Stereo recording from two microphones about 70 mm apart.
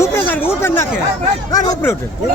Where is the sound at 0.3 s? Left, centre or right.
Left.